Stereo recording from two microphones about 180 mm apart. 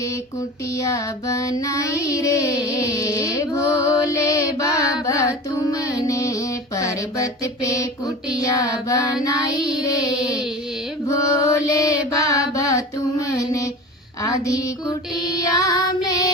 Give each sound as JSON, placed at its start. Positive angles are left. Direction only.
{"t": 0.8, "sound": "child singing", "side_deg": 15}
{"t": 2.9, "sound": "a sound", "side_deg": 20}
{"t": 7.4, "sound": "child singing", "side_deg": 20}
{"t": 11.1, "sound": "mantra", "side_deg": 20}
{"t": 14.2, "sound": "a sound", "side_deg": 20}
{"t": 15.5, "sound": "child singing", "side_deg": 20}